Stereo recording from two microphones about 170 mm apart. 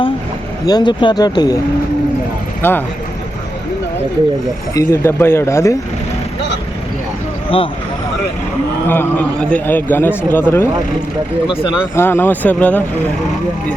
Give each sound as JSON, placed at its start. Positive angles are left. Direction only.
{"t": 0.7, "sound": "speech", "side_deg": 25}
{"t": 2.6, "sound": "speech", "side_deg": 10}
{"t": 4.7, "sound": "a man's voice", "side_deg": 15}
{"t": 7.5, "sound": "speech", "side_deg": 35}
{"t": 8.9, "sound": "a man's voice", "side_deg": 10}
{"t": 11.4, "sound": "speech", "side_deg": -5}
{"t": 11.9, "sound": "a man's voice", "side_deg": 15}